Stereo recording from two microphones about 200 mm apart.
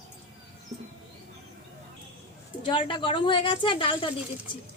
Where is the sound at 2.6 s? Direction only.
25° left (ahead or behind).